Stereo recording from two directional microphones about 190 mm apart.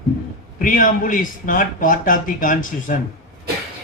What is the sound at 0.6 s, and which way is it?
Speech, 45° left (ahead or behind).